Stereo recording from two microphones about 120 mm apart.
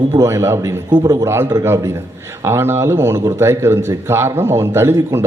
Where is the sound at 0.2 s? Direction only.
25° right (ahead or behind).